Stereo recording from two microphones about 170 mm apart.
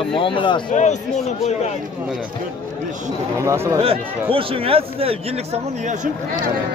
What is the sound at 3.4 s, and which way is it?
Speech, 15° right (ahead or behind).